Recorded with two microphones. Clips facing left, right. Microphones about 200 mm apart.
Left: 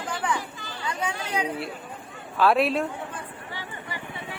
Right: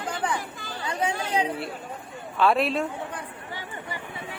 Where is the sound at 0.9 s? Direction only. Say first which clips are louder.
Right 3 dB; 30° right (ahead or behind).